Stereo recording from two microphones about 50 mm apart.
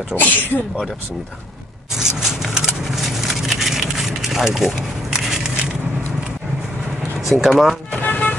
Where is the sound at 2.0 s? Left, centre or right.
Centre.